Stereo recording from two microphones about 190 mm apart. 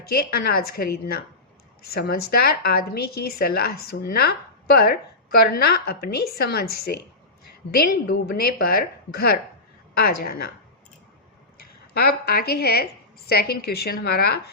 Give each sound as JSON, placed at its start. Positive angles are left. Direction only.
{"t": 0.0, "sound": "a woman's voice", "side_deg": 55}
{"t": 11.5, "sound": "a woman's voice", "side_deg": 50}